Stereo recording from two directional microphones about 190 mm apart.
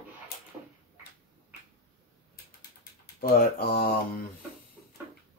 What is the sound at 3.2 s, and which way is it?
Speech, 50° left (ahead or behind).